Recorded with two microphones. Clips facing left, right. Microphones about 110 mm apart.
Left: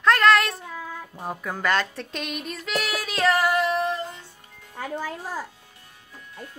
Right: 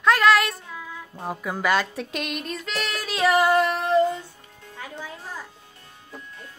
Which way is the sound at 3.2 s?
15° right (ahead or behind).